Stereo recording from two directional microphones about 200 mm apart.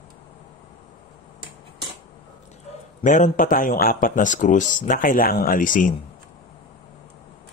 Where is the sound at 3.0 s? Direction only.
40° left (ahead or behind).